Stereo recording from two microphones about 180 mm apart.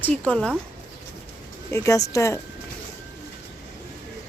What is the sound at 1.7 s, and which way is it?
Speech, 15° left (ahead or behind).